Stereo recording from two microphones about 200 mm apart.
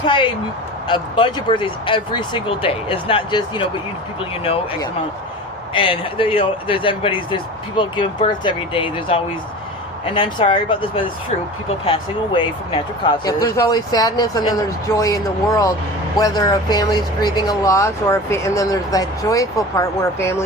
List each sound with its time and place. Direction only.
0.0 s speech: 25° left (ahead or behind)
5.7 s speech: 25° left (ahead or behind)